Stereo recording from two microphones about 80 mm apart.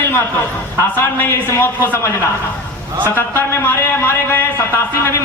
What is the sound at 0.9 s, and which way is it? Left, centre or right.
A man's voice, left.